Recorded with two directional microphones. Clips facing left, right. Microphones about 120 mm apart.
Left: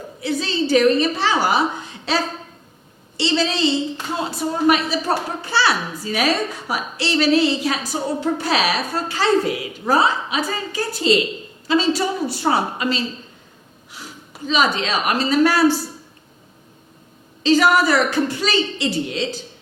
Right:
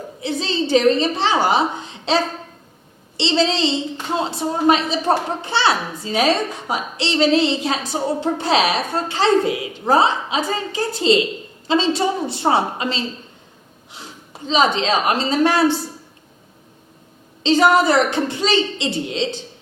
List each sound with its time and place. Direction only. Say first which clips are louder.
0.2 s a woman's voice: even; 25° right (ahead or behind)
17.4 s a woman's voice: right 1 dB; 25° right (ahead or behind)